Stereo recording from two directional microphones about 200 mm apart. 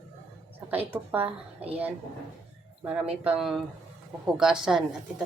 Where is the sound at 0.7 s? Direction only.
10° right (ahead or behind).